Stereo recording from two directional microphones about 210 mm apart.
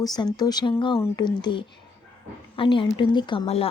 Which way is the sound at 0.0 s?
20° left (ahead or behind).